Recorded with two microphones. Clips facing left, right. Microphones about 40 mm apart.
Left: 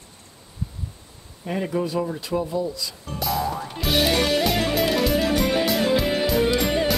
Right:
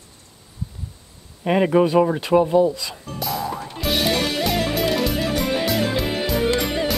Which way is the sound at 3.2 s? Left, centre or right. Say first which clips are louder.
Left 1 dB; centre.